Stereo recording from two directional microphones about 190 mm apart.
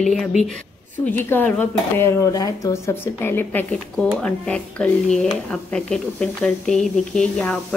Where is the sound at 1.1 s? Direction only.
10° left (ahead or behind).